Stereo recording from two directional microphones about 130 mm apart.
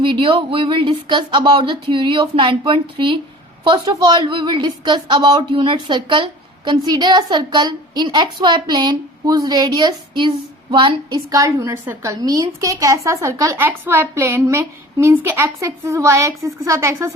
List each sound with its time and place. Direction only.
0.0 s a woman's voice: 40° right (ahead or behind)
11.3 s a woman's voice: 25° right (ahead or behind)